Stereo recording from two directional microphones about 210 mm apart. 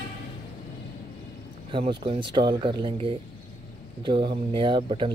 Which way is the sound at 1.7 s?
25° right (ahead or behind).